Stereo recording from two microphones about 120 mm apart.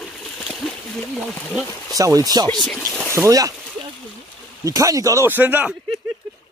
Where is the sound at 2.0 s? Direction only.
30° right (ahead or behind).